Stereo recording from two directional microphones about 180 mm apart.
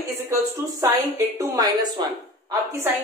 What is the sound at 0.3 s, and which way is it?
A woman's voice, 15° right (ahead or behind).